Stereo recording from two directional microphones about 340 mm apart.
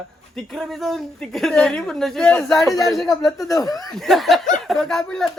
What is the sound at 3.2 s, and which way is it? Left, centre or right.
Speech, centre.